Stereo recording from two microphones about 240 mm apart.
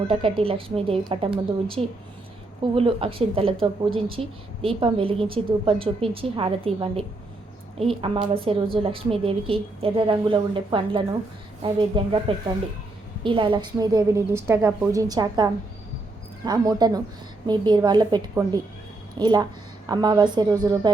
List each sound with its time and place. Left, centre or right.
0.1 s speech: right
13.2 s a woman's voice: right